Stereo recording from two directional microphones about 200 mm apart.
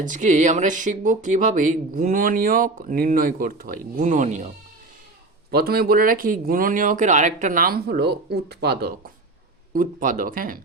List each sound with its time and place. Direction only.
0.0 s speech: 40° right (ahead or behind)
5.5 s speech: 50° right (ahead or behind)
9.7 s speech: 40° right (ahead or behind)